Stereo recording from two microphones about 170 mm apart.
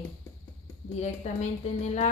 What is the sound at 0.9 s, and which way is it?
Speech, 40° left (ahead or behind).